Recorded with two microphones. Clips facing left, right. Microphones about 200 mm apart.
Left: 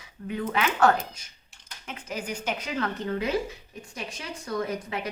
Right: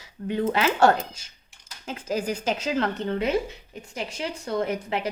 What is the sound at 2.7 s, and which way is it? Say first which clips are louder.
Speech: right 3 dB; 30° right (ahead or behind).